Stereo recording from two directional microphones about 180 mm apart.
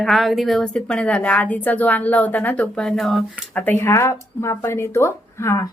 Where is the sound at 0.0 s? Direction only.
Centre (ahead or behind).